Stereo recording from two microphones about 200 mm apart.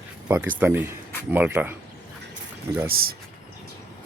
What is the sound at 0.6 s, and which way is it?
Speech, 10° right (ahead or behind).